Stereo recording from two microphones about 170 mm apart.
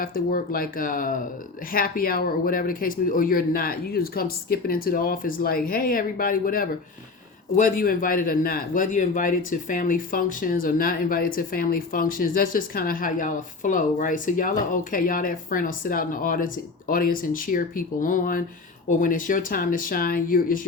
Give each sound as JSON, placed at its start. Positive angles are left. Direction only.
{"t": 0.0, "sound": "a man's voice", "side_deg": 60}